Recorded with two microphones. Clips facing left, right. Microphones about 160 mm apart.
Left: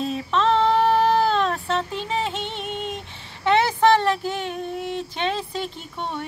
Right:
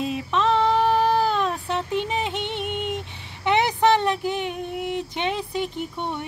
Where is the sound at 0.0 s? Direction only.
15° right (ahead or behind).